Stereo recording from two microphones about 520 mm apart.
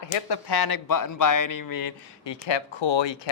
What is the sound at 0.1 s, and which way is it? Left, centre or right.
Speech, left.